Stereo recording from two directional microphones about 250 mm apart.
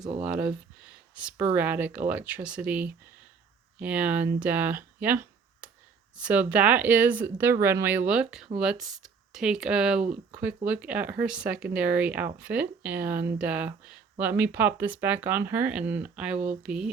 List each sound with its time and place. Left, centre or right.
0.2 s speech: centre